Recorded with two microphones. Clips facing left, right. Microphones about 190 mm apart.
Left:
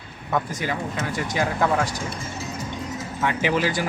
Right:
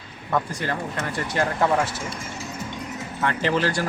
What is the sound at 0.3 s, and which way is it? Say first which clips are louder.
Speech: even; centre (ahead or behind).